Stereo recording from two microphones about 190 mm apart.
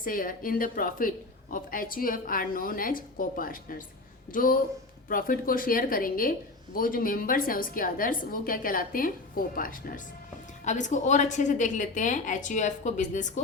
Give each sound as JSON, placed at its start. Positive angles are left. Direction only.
{"t": 0.0, "sound": "a woman's voice", "side_deg": 45}